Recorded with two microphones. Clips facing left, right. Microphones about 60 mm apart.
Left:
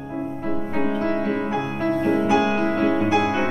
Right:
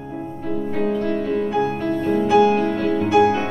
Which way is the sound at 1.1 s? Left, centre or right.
Left.